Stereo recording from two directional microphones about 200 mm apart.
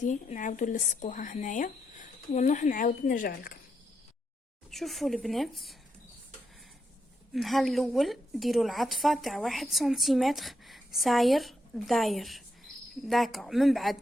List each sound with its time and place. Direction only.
0.0 s speech: 40° left (ahead or behind)
4.7 s a woman's voice: centre (ahead or behind)
7.3 s a woman's voice: centre (ahead or behind)